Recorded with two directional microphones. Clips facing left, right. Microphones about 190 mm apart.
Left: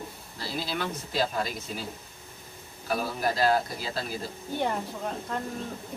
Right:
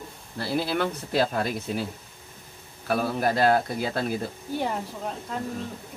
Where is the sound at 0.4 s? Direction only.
60° right (ahead or behind).